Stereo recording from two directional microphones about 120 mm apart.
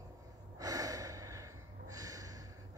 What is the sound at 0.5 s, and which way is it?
Gasp, 30° right (ahead or behind).